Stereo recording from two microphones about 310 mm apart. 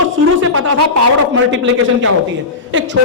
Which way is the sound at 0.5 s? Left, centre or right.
Right.